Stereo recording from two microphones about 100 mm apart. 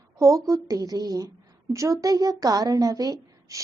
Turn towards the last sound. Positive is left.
turn(degrees=-35)  # may be behind; listen again after turning